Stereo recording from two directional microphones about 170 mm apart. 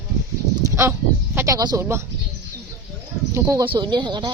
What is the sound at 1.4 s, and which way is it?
Speech, 20° right (ahead or behind).